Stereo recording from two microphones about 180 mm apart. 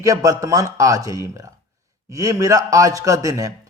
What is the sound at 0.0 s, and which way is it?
Speech, 20° right (ahead or behind).